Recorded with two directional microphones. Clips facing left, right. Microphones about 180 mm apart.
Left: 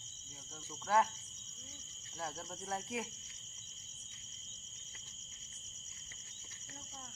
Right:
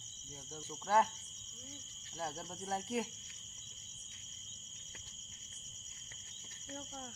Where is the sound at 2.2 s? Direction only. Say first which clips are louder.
Right 1 dB; 30° right (ahead or behind).